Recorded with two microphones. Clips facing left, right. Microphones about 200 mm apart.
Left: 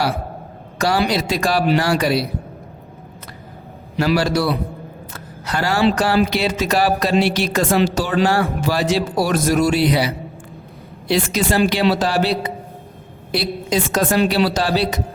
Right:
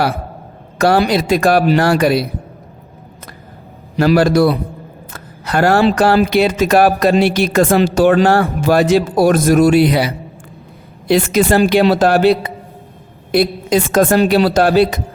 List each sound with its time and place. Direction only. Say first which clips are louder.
0.8 s speech: right 6 dB; 55° right (ahead or behind)
3.9 s speech: right 6 dB; 50° right (ahead or behind)
11.3 s speech: right 6 dB; 55° right (ahead or behind)
13.3 s speech: right 7 dB; 55° right (ahead or behind)